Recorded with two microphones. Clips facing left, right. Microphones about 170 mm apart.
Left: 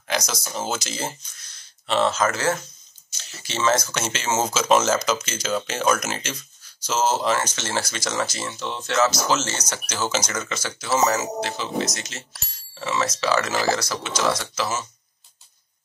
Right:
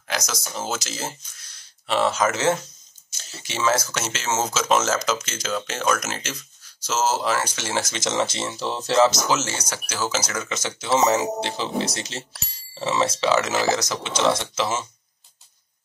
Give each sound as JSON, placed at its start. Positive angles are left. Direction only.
{"t": 0.1, "sound": "speech", "side_deg": 0}
{"t": 9.3, "sound": "speech", "side_deg": -10}
{"t": 10.5, "sound": "speech", "side_deg": -20}